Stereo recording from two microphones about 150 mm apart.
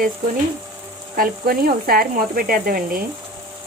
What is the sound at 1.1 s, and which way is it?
Speech, 80° right.